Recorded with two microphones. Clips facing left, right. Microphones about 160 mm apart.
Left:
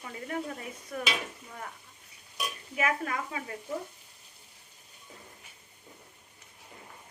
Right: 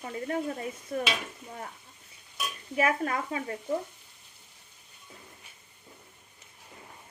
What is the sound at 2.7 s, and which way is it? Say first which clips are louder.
Speech: right 4 dB; 35° right (ahead or behind).